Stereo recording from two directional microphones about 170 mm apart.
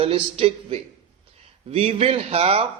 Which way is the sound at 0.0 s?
35° right (ahead or behind).